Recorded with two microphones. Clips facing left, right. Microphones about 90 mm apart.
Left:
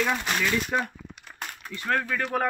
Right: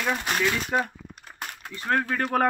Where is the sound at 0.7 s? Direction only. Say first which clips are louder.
Right 4 dB; 20° right (ahead or behind).